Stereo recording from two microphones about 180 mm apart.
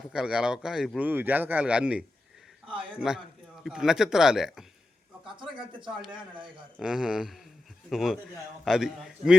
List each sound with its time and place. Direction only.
0.1 s a man's voice: 5° right (ahead or behind)
5.4 s speech: 25° right (ahead or behind)
6.7 s a man's voice: 5° right (ahead or behind)